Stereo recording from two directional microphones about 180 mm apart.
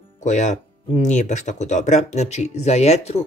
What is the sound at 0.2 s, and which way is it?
Speech, 40° left (ahead or behind).